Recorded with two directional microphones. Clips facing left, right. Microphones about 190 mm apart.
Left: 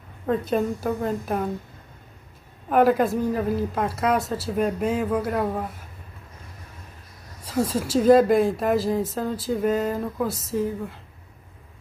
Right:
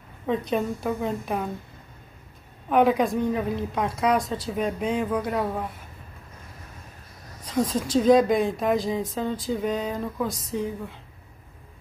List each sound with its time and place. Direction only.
0.3 s a woman's voice: centre (ahead or behind)
2.7 s a woman's voice: 5° left (ahead or behind)
7.4 s a woman's voice: 10° left (ahead or behind)